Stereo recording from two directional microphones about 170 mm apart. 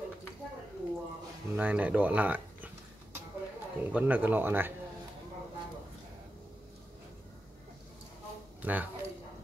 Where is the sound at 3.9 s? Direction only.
10° right (ahead or behind).